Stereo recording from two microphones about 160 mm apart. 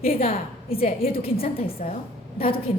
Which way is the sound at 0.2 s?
40° left (ahead or behind).